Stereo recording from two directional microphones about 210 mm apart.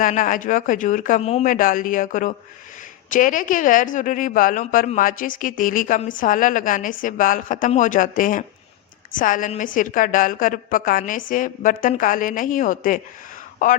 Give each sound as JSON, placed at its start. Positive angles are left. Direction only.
{"t": 0.0, "sound": "a woman's voice", "side_deg": 40}